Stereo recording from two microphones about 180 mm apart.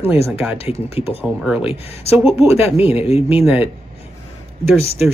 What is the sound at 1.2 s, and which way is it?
Speech, 5° right (ahead or behind).